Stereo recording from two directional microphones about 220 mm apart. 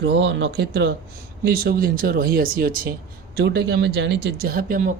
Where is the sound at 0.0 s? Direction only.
55° right (ahead or behind).